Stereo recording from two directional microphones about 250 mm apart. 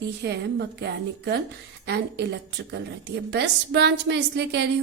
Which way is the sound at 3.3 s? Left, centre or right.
Right.